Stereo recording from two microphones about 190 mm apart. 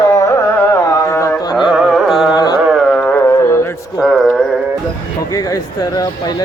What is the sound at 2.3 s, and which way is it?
Carnatic music, 20° left (ahead or behind).